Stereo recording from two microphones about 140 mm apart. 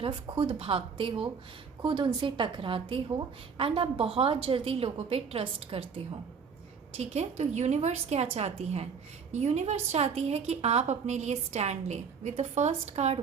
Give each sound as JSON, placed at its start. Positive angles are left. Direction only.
{"t": 0.0, "sound": "a woman's voice", "side_deg": -40}
{"t": 6.9, "sound": "a woman's voice", "side_deg": -50}